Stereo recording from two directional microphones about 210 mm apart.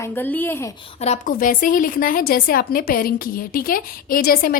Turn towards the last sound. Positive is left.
turn(degrees=45)  # may be behind; listen again after turning